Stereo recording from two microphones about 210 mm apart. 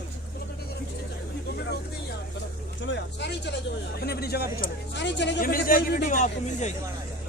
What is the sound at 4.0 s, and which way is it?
A man's voice, 50° left (ahead or behind).